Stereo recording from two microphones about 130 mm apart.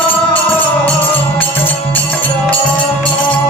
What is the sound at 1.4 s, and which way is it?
Music, 15° left (ahead or behind).